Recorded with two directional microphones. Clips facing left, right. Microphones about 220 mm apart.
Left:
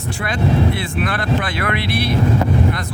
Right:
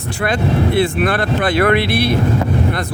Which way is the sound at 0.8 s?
60° right (ahead or behind).